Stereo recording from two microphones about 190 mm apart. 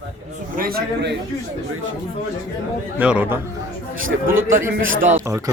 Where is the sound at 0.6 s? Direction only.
50° right (ahead or behind).